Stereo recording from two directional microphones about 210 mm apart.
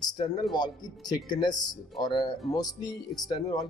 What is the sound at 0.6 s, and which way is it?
Speech, 20° left (ahead or behind).